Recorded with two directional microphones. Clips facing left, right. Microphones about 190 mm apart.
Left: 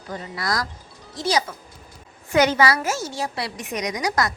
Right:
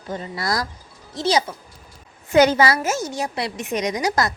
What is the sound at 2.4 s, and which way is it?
A woman's voice, 30° right (ahead or behind).